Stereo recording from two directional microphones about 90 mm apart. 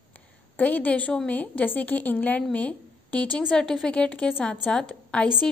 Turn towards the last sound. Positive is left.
turn(degrees=10)  # may be behind; listen again after turning